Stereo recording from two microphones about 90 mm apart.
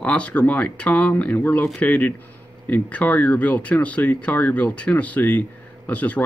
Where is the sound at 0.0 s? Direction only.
15° left (ahead or behind).